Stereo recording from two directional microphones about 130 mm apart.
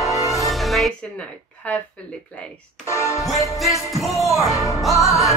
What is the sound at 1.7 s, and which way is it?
Speech, 10° left (ahead or behind).